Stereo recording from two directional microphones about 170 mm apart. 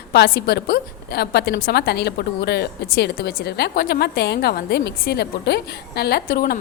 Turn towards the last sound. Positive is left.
turn(degrees=60)  # may be behind; listen again after turning